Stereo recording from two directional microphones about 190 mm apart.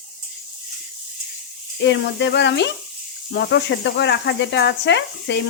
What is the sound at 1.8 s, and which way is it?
Speech, 65° left (ahead or behind).